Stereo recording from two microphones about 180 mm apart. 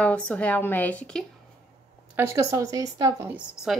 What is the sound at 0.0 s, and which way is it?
A woman's voice, 5° left (ahead or behind).